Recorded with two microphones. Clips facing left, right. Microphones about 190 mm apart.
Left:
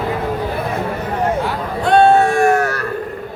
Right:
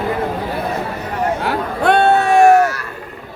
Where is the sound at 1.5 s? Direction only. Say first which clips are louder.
Right 1 dB; 60° right (ahead or behind).